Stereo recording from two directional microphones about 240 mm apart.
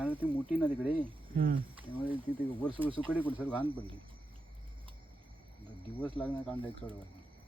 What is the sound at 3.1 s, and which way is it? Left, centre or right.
Speech, centre.